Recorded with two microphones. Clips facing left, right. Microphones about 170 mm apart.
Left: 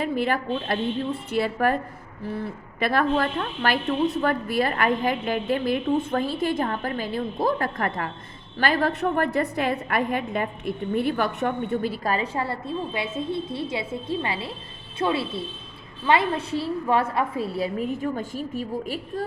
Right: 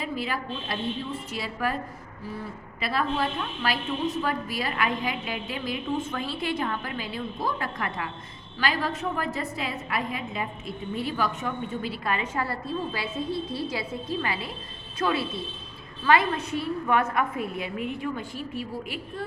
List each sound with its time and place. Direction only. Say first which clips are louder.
0.0 s a woman's voice: left 6 dB; 55° left (ahead or behind)
2.8 s a woman's voice: left 5 dB; 60° left (ahead or behind); by 19.2 s 40° left (ahead or behind)